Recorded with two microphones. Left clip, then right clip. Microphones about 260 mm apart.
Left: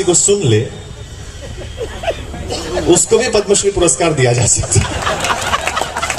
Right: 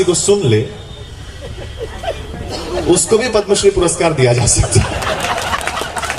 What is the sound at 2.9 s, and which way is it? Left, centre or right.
A man's voice, left.